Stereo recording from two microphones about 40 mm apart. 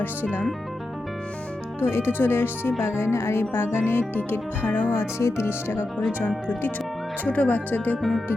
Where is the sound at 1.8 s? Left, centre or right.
Left.